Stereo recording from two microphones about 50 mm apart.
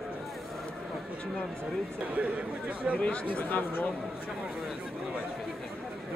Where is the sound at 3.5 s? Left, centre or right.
Left.